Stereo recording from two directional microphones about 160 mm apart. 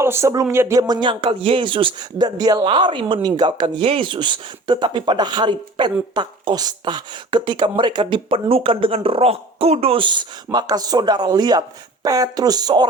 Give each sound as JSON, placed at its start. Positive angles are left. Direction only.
{"t": 0.0, "sound": "speech", "side_deg": -15}